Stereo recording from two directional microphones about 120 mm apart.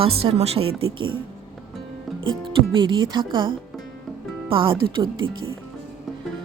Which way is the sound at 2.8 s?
40° right (ahead or behind).